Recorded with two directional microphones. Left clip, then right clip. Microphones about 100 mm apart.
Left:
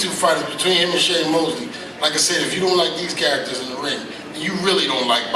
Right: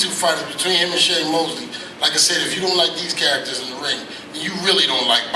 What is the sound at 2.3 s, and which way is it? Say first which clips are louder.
Speech: even; 15° right (ahead or behind).